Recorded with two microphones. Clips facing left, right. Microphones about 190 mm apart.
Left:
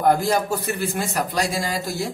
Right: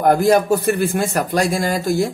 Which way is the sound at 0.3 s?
55° right (ahead or behind).